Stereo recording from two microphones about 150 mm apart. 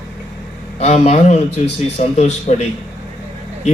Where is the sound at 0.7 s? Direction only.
45° left (ahead or behind).